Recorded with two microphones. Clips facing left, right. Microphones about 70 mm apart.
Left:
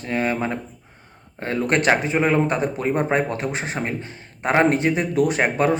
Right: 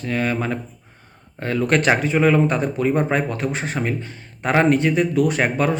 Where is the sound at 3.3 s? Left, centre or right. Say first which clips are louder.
Right 1 dB; centre.